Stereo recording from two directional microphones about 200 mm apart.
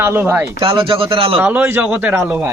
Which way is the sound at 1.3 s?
10° right (ahead or behind).